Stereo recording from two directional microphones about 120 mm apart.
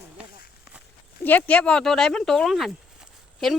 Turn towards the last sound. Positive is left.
turn(degrees=0)  # may be behind; listen again after turning